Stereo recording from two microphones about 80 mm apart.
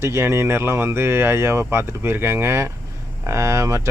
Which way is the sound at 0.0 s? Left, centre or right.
Right.